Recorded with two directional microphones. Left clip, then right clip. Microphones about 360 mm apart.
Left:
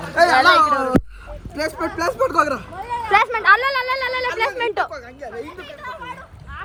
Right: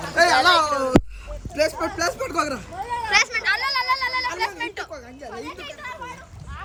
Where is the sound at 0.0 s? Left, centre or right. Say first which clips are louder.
Left 3 dB; centre.